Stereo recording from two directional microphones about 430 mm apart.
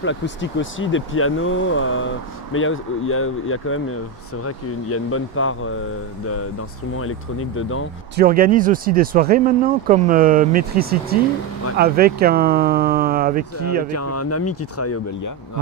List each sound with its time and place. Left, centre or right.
0.0 s speech: left
7.0 s speech: left
8.2 s speech: centre
13.9 s speech: left